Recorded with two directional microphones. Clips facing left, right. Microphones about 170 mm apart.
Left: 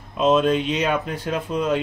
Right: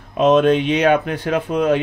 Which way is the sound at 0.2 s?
65° right (ahead or behind).